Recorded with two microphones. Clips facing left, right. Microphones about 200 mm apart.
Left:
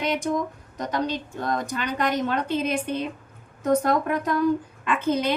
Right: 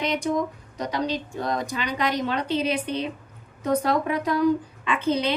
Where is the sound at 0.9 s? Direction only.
50° left (ahead or behind).